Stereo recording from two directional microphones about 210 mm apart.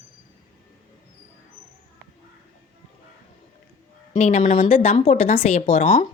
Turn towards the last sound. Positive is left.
turn(degrees=25)  # may be behind; listen again after turning